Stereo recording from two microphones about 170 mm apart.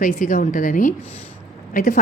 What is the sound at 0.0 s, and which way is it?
A woman's voice, 55° left (ahead or behind).